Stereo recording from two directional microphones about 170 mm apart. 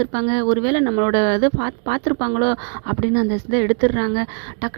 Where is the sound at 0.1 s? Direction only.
40° right (ahead or behind).